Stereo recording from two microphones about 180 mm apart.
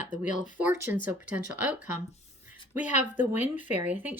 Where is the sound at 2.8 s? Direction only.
45° left (ahead or behind).